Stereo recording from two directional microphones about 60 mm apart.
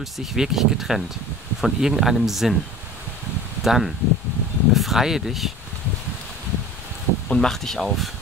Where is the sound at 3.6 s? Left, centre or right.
Centre.